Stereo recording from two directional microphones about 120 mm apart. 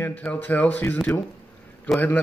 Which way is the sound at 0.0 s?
10° left (ahead or behind).